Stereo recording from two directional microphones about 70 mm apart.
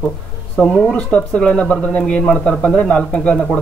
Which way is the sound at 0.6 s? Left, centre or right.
Centre.